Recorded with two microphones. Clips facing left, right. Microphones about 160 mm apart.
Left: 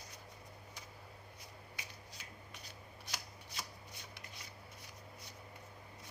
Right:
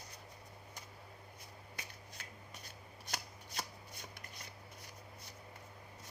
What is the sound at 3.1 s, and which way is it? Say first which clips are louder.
Shuffling cards: right 4 dB; 50° right (ahead or behind).